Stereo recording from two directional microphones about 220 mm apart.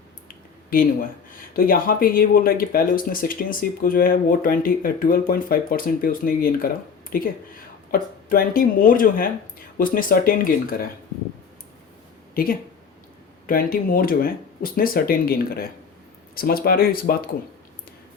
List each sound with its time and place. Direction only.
0.7 s speech: 40° left (ahead or behind)
7.9 s speech: 40° left (ahead or behind)
12.3 s speech: 40° left (ahead or behind)